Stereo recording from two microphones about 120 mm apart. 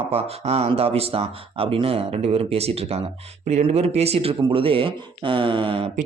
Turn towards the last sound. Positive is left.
turn(degrees=-50)  # may be behind; listen again after turning